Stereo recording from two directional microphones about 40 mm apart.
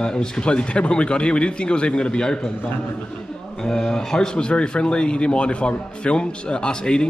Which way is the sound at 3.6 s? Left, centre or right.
Centre.